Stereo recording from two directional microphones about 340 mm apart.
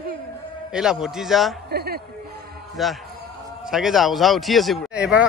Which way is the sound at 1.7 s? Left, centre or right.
Right.